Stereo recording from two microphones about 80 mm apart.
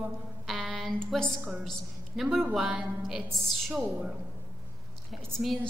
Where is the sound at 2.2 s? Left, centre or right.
Centre.